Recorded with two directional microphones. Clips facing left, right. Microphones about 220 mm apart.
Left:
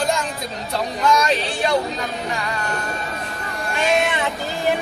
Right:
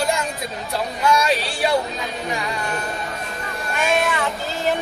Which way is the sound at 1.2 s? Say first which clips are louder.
Even; 10° right (ahead or behind).